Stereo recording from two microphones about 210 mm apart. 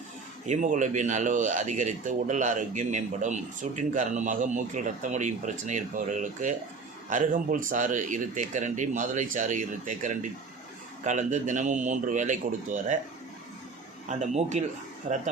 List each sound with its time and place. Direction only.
0.4 s speech: 35° right (ahead or behind)
14.1 s speech: 35° right (ahead or behind)